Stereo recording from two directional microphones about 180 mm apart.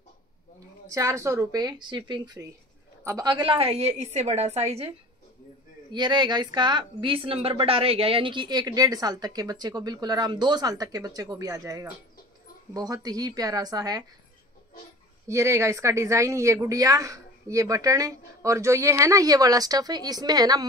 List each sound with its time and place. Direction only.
0.8 s a woman's voice: 15° right (ahead or behind); by 4.9 s 35° right (ahead or behind)
5.9 s speech: 25° right (ahead or behind)
15.2 s speech: 15° right (ahead or behind)